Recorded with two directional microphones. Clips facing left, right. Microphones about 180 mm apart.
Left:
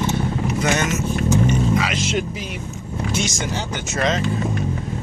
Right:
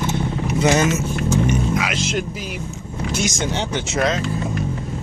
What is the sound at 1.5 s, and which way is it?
Vehicle, 10° right (ahead or behind).